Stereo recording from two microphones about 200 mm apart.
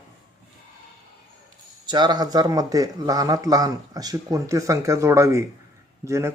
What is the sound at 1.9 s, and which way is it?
Speech, 20° right (ahead or behind).